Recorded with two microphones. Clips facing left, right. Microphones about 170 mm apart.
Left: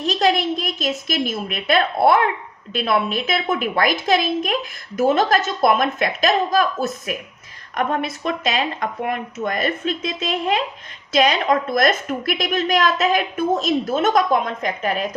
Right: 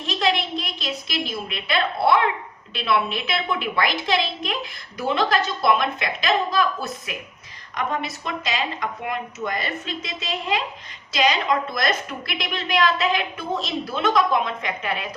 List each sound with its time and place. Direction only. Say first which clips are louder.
0.0 s a woman's voice: left 5 dB; 40° left (ahead or behind)